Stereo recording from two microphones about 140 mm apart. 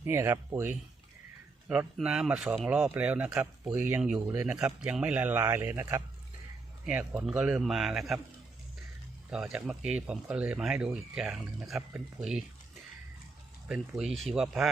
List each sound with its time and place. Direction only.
0.0 s speech: 20° right (ahead or behind)
2.0 s a man's voice: 5° right (ahead or behind)
6.8 s a man's voice: 10° right (ahead or behind)
9.3 s speech: 10° right (ahead or behind)
14.0 s a man's voice: centre (ahead or behind)